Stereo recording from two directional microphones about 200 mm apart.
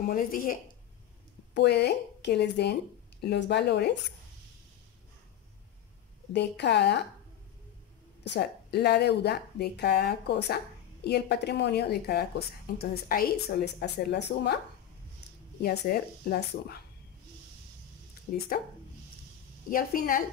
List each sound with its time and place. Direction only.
0.1 s a woman's voice: 45° left (ahead or behind)
1.5 s speech: 55° left (ahead or behind)
6.3 s speech: 60° left (ahead or behind)
8.2 s a woman's voice: 55° left (ahead or behind)
15.6 s a woman's voice: 50° left (ahead or behind)
18.3 s a woman's voice: 50° left (ahead or behind)
19.7 s a woman's voice: 45° left (ahead or behind)